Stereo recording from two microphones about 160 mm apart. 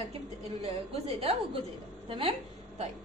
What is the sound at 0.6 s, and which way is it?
A woman's voice, 40° right (ahead or behind).